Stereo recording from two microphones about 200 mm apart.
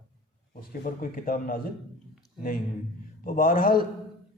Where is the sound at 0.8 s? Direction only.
45° left (ahead or behind).